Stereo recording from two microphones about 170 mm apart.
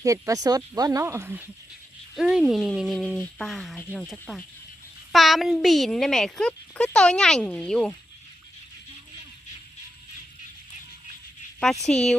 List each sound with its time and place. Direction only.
0.0 s a child's voice: 20° right (ahead or behind); by 7.9 s 5° left (ahead or behind)
11.9 s a child's voice: 5° left (ahead or behind)